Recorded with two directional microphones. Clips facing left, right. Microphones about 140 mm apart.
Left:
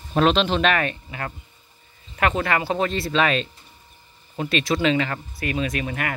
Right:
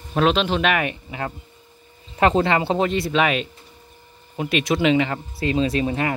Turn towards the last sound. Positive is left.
turn(degrees=-25)  # may be behind; listen again after turning